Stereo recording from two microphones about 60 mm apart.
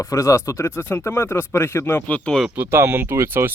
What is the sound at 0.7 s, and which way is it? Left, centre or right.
Speech, left.